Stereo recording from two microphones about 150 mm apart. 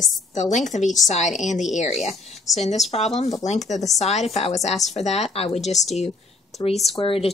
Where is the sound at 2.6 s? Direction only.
50° left (ahead or behind).